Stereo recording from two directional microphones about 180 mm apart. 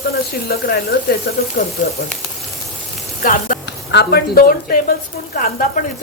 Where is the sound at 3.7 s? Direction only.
65° left (ahead or behind).